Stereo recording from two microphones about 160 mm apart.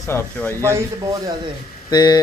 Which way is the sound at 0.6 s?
15° right (ahead or behind).